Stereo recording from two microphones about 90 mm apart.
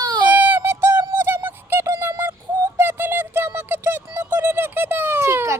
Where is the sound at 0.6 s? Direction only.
25° right (ahead or behind).